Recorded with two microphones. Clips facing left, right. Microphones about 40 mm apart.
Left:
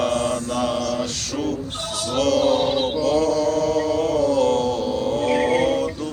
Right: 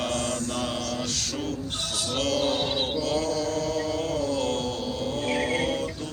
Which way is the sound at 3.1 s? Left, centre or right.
Left.